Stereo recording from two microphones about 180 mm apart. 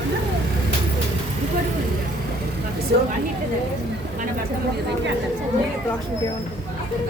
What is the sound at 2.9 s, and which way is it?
Vehicle, 65° right (ahead or behind).